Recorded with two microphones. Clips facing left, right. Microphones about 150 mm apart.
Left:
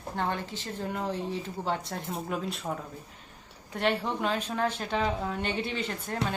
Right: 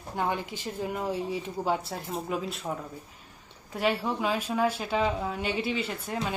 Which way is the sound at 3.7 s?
5° right (ahead or behind).